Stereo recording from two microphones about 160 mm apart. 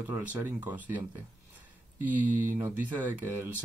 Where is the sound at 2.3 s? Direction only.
15° right (ahead or behind).